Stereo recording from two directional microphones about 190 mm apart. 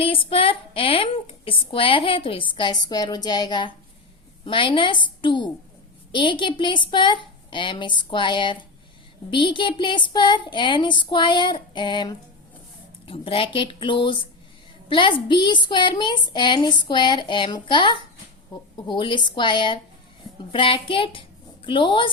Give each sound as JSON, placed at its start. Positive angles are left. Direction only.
{"t": 0.0, "sound": "speech", "side_deg": 30}